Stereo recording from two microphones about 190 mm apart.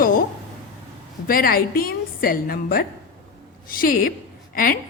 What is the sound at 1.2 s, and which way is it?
A woman's voice, 50° left (ahead or behind).